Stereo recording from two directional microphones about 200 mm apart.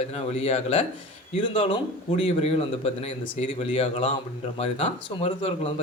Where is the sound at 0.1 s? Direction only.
30° left (ahead or behind).